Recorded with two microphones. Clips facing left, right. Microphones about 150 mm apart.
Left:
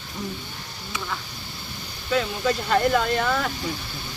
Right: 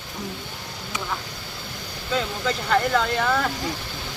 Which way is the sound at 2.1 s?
10° left (ahead or behind).